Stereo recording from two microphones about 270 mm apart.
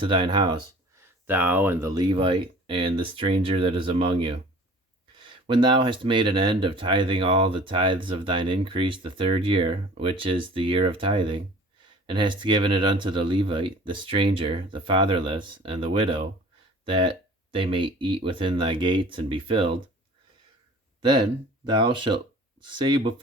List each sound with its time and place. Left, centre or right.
0.0 s speech: centre
21.0 s speech: centre